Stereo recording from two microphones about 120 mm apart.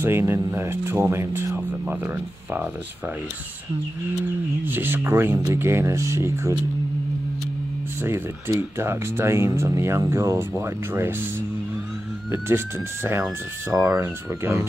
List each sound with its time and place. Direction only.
0.0 s speech: 20° right (ahead or behind)
4.6 s speech: 15° right (ahead or behind)
8.5 s speech: 20° right (ahead or behind)